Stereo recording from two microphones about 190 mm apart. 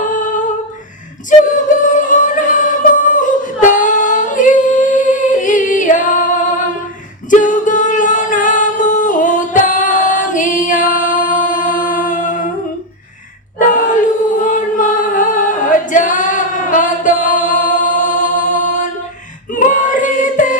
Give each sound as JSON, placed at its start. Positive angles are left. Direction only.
{"t": 0.0, "sound": "humming", "side_deg": 45}
{"t": 1.3, "sound": "music", "side_deg": 40}
{"t": 7.3, "sound": "singing", "side_deg": 45}
{"t": 13.6, "sound": "a sound", "side_deg": 45}
{"t": 14.4, "sound": "a capella", "side_deg": 40}
{"t": 19.5, "sound": "choir", "side_deg": 40}